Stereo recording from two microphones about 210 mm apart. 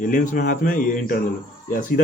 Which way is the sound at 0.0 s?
40° left (ahead or behind).